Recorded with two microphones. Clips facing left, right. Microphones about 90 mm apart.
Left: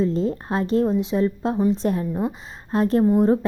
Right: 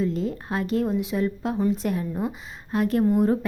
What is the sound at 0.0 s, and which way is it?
A woman's voice, 30° left (ahead or behind).